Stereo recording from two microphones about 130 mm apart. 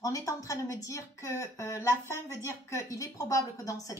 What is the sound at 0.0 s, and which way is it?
A woman's voice, 25° left (ahead or behind).